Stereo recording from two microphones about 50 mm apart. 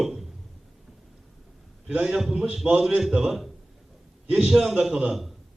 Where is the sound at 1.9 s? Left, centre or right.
Centre.